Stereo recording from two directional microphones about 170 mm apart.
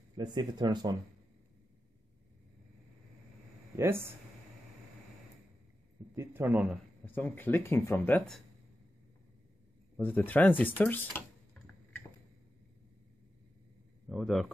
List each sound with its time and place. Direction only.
0.1 s speech: 25° right (ahead or behind)
3.7 s a man's voice: 15° right (ahead or behind)
6.1 s a man's voice: 10° right (ahead or behind)
7.1 s speech: 10° left (ahead or behind)
9.9 s speech: 10° left (ahead or behind)
14.0 s speech: centre (ahead or behind)